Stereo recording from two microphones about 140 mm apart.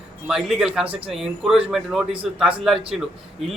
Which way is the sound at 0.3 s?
5° right (ahead or behind).